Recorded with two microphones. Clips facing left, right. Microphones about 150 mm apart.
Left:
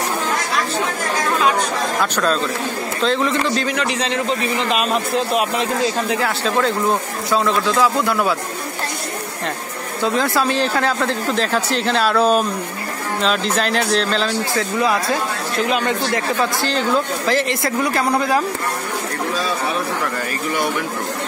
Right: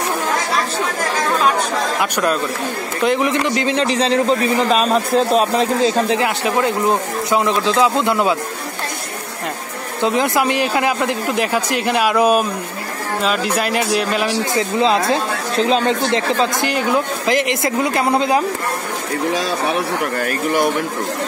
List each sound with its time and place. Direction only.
2.0 s speech: 10° right (ahead or behind)
3.7 s a man's voice: 30° right (ahead or behind)
10.0 s speech: 20° right (ahead or behind)
14.5 s a man's voice: 20° right (ahead or behind)
16.6 s a man's voice: 15° right (ahead or behind)
19.3 s speech: 85° right